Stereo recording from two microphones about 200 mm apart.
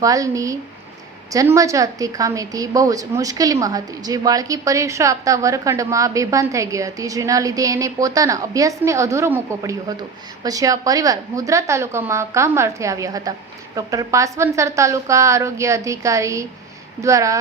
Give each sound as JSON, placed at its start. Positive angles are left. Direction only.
{"t": 0.0, "sound": "a woman's voice", "side_deg": -15}